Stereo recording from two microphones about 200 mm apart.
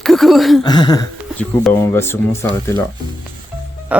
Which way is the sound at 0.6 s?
20° left (ahead or behind).